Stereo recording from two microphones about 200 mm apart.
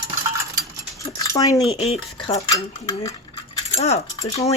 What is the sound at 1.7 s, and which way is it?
Speech, 30° left (ahead or behind).